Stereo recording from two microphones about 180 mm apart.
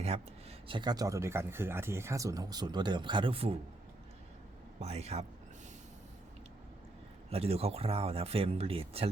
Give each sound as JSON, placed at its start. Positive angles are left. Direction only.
{"t": 0.7, "sound": "speech", "side_deg": -25}
{"t": 4.8, "sound": "speech", "side_deg": -35}
{"t": 7.3, "sound": "speech", "side_deg": -35}